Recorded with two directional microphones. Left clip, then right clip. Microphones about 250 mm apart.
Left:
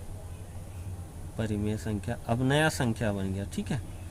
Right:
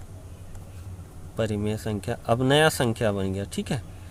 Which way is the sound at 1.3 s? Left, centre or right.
Right.